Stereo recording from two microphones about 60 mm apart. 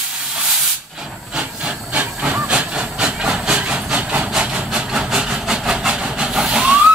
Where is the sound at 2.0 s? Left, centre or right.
Right.